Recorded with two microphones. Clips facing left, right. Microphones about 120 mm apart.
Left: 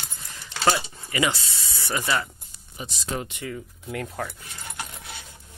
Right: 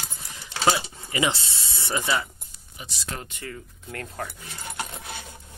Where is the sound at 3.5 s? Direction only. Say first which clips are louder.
Left 5 dB; 5° left (ahead or behind).